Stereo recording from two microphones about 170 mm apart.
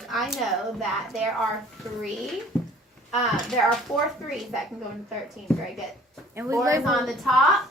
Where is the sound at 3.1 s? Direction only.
Centre (ahead or behind).